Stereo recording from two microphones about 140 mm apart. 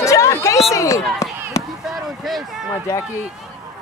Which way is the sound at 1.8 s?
Centre (ahead or behind).